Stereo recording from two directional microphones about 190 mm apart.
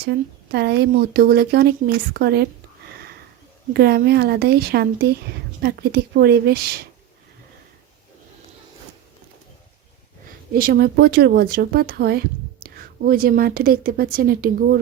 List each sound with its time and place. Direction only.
0.0 s speech: 60° right (ahead or behind)
3.7 s speech: 55° right (ahead or behind)
10.5 s a woman's voice: 55° right (ahead or behind)